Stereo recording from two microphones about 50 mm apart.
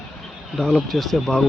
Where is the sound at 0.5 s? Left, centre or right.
Centre.